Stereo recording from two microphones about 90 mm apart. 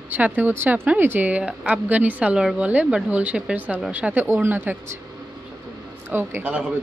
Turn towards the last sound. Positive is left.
turn(degrees=-20)  # may be behind; listen again after turning